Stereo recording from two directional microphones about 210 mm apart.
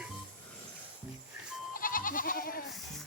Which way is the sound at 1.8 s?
40° left (ahead or behind).